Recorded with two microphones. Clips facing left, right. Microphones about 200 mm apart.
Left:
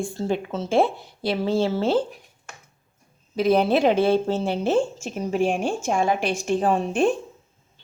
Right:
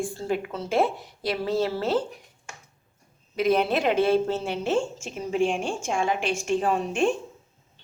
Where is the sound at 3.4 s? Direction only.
30° left (ahead or behind).